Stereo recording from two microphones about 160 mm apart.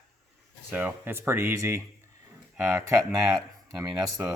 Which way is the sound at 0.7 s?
10° right (ahead or behind).